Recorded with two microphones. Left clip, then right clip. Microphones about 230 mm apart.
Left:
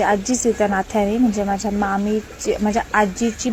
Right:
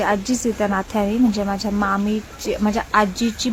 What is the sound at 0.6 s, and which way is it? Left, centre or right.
Speech, centre.